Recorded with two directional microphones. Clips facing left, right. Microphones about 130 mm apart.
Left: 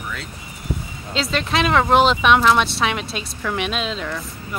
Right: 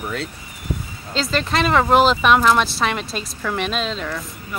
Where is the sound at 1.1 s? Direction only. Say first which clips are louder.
Right 1 dB; centre (ahead or behind).